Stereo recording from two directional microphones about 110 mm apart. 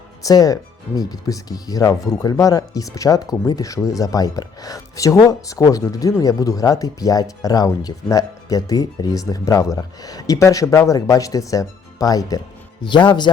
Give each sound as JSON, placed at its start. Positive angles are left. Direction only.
{"t": 0.3, "sound": "speech", "side_deg": 35}
{"t": 12.8, "sound": "a man's voice", "side_deg": 45}